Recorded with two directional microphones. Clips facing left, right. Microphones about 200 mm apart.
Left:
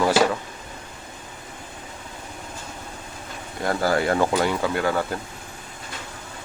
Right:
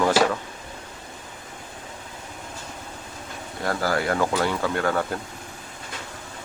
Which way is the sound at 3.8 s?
25° left (ahead or behind).